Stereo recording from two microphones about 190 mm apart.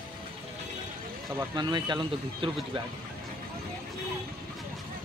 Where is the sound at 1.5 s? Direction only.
25° right (ahead or behind).